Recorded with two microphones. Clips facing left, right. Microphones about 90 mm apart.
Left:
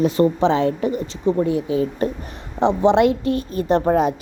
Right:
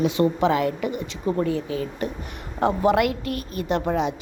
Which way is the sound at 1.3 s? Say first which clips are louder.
Left 5 dB; 15° left (ahead or behind).